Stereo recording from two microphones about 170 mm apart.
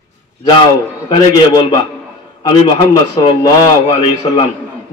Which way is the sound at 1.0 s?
25° left (ahead or behind).